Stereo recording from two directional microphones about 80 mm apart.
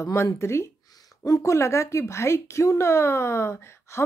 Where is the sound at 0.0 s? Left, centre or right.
Left.